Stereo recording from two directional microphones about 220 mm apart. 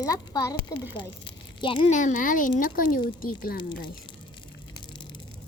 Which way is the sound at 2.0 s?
35° left (ahead or behind).